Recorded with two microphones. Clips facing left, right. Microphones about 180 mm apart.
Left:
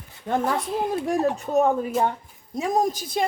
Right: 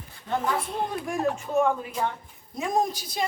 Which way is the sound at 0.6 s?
Centre (ahead or behind).